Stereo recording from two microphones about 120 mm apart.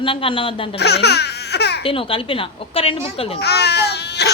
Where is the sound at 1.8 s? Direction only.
50° left (ahead or behind).